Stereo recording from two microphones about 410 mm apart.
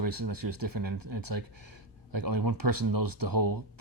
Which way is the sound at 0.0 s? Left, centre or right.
Right.